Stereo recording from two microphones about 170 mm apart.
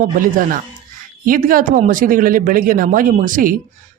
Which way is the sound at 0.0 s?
55° right (ahead or behind).